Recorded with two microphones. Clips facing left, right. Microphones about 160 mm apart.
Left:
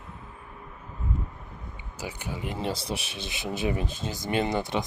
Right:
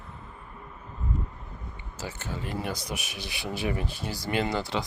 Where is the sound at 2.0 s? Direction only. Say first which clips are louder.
Left 1 dB; 15° left (ahead or behind).